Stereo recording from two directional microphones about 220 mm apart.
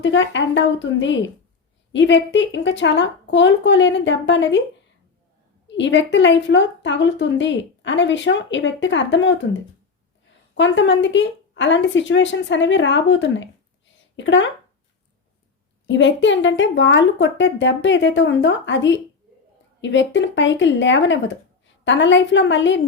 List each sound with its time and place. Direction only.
0.0 s a woman's voice: 55° left (ahead or behind)
5.6 s a woman's voice: 55° left (ahead or behind)
15.9 s a woman's voice: 55° left (ahead or behind)